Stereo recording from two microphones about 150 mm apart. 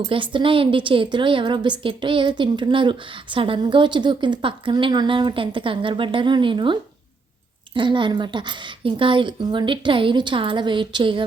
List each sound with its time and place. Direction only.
0.1 s a woman's voice: 35° right (ahead or behind)